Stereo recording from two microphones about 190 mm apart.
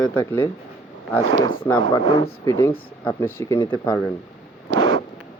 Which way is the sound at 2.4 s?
15° left (ahead or behind).